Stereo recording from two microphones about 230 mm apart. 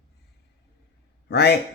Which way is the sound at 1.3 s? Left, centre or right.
Left.